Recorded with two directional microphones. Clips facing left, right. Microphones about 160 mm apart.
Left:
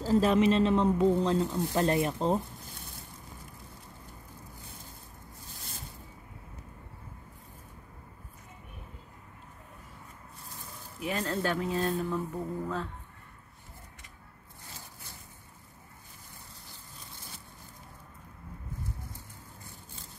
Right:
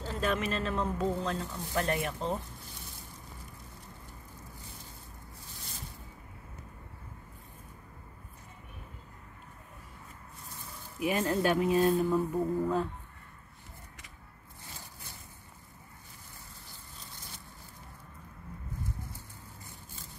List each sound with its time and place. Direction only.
0.0 s speech: 35° left (ahead or behind)
11.0 s speech: 15° right (ahead or behind)